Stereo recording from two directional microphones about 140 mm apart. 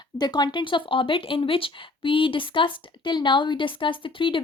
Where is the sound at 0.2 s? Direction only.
30° left (ahead or behind).